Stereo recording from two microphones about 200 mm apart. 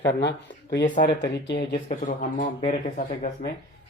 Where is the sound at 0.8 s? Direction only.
40° left (ahead or behind).